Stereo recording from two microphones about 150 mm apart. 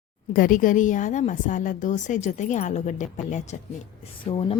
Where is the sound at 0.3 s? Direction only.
65° left (ahead or behind).